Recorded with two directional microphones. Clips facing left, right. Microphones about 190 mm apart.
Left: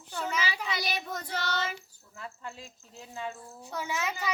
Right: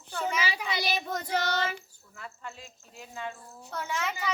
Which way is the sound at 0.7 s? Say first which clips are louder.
Right 3 dB; 30° right (ahead or behind).